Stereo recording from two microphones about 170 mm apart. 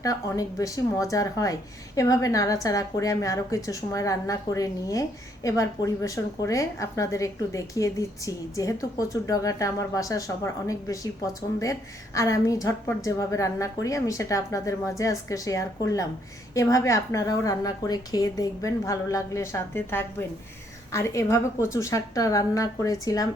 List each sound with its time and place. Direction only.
0.0 s a woman's voice: 20° left (ahead or behind)